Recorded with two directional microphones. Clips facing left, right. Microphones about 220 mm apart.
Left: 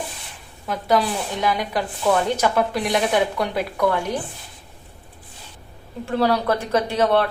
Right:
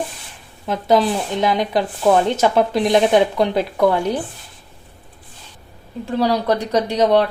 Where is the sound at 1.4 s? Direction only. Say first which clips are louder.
Right 4 dB; 25° right (ahead or behind).